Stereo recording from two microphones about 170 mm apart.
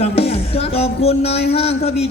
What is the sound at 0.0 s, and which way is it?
Music, 35° left (ahead or behind).